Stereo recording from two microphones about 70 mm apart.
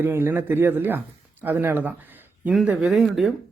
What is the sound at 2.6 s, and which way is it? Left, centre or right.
Speech, centre.